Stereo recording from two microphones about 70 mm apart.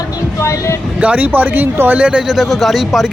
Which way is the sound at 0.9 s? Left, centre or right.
Right.